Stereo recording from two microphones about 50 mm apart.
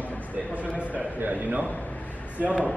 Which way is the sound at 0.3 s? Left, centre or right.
Right.